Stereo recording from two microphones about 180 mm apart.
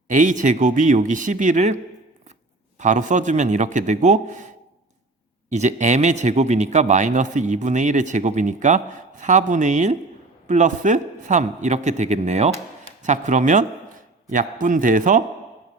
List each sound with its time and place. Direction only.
0.1 s speech: 45° right (ahead or behind)
5.5 s a man's voice: 40° right (ahead or behind)